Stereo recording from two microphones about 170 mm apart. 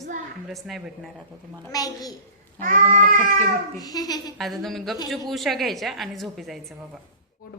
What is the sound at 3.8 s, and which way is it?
Speech, 25° left (ahead or behind).